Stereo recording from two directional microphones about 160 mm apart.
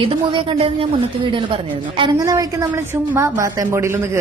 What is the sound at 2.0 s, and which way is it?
A woman's voice, 20° right (ahead or behind).